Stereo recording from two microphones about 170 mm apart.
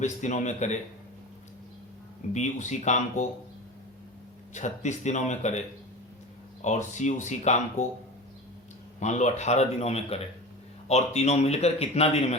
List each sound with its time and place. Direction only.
0.0 s speech: 45° left (ahead or behind)
2.3 s speech: 45° left (ahead or behind)
4.5 s speech: 45° left (ahead or behind)
9.0 s speech: 45° left (ahead or behind)